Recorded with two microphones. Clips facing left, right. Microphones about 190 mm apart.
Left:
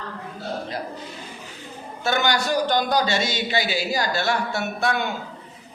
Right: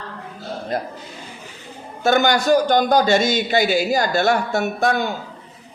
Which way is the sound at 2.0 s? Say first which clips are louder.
Right 7 dB; 45° right (ahead or behind).